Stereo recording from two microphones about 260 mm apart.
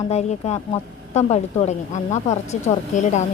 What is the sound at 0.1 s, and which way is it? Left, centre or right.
A woman's voice, left.